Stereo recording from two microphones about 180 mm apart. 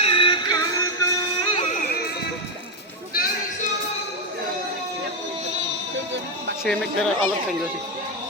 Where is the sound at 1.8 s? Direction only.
60° left (ahead or behind).